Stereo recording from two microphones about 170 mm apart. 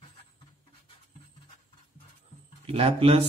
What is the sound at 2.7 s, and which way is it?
Speech, 35° right (ahead or behind).